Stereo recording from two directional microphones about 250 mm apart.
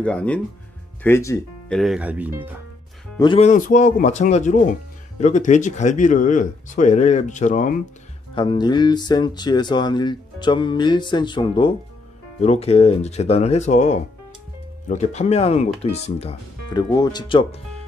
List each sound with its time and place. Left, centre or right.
0.0 s speech: centre
1.8 s speech: centre
3.2 s speech: left
8.4 s speech: centre